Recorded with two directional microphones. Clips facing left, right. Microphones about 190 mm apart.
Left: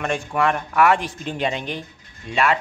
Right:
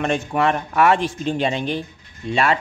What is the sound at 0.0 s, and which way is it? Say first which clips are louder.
Speech: right 2 dB; 25° right (ahead or behind).